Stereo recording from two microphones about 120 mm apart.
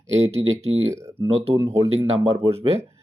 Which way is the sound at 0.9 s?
25° right (ahead or behind).